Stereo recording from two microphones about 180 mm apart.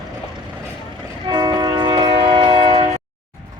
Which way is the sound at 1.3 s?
25° right (ahead or behind).